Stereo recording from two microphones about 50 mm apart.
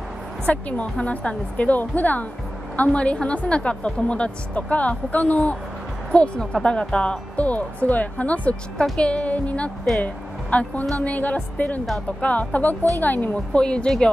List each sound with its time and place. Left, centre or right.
0.5 s a woman's voice: left
13.5 s a woman's voice: centre